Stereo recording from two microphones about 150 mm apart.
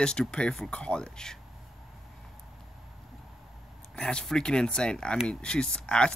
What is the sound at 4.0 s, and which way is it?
Speech, 5° left (ahead or behind).